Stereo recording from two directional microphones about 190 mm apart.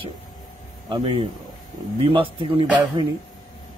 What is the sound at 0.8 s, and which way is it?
A man's voice, 25° right (ahead or behind).